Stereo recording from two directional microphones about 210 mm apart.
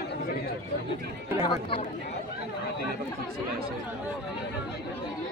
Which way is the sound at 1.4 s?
25° left (ahead or behind).